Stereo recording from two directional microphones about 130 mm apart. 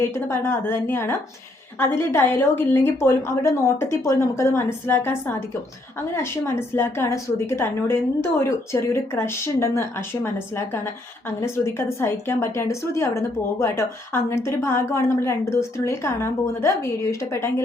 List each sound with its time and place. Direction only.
0.0 s a woman's voice: 20° left (ahead or behind)
11.3 s a woman's voice: 20° left (ahead or behind)